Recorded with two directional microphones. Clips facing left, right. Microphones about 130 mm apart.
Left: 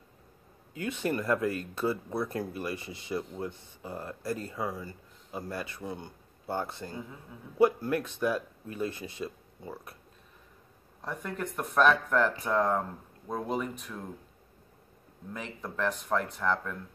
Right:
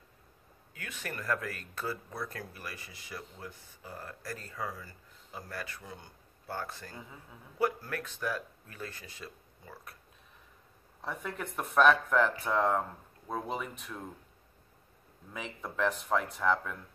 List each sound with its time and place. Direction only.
0.7 s speech: 20° left (ahead or behind)
11.0 s speech: centre (ahead or behind)
15.3 s speech: centre (ahead or behind)